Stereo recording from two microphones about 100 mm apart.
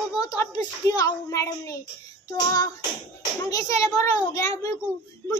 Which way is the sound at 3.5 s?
35° left (ahead or behind).